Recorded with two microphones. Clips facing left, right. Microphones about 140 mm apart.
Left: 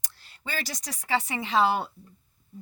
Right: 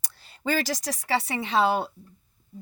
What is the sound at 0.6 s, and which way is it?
Speech, 90° right.